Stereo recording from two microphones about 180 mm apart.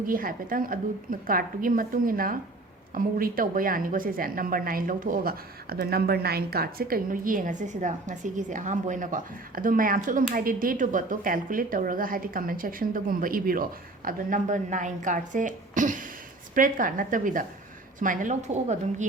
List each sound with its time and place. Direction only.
0.0 s speech: 50° right (ahead or behind)